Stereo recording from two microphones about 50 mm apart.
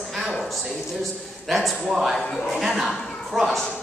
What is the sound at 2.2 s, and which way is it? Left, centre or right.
Speech, centre.